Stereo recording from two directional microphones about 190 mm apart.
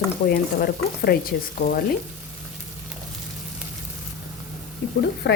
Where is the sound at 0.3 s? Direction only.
55° left (ahead or behind).